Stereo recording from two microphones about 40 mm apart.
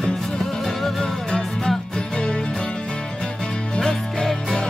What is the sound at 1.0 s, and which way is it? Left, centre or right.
Music, centre.